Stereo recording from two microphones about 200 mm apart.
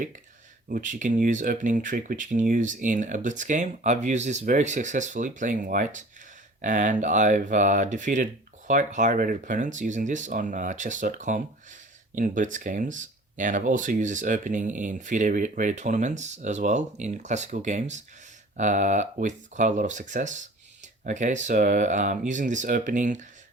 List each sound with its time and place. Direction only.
0.7 s speech: 40° right (ahead or behind)